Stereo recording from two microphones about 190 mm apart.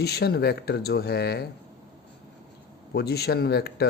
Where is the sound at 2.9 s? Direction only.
55° left (ahead or behind).